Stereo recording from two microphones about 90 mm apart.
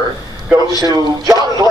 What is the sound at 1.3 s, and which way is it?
Speech, 45° right (ahead or behind).